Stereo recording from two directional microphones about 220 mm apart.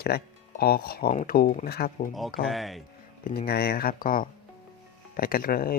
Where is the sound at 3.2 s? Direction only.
45° left (ahead or behind).